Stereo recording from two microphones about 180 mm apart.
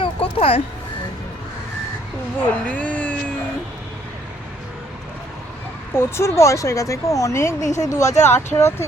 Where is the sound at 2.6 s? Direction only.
5° left (ahead or behind).